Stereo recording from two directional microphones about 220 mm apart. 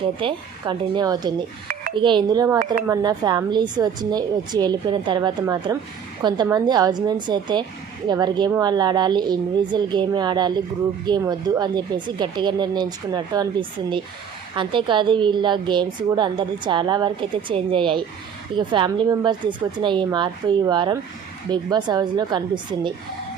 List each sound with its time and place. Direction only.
0.2 s a woman's voice: 20° right (ahead or behind)